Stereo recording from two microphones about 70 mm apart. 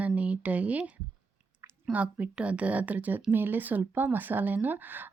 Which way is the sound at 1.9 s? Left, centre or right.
Right.